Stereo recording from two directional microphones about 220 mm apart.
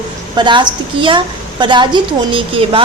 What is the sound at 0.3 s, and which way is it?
A woman's voice, 20° right (ahead or behind).